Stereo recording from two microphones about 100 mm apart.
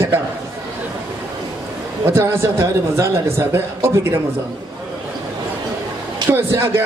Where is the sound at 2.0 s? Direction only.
25° right (ahead or behind).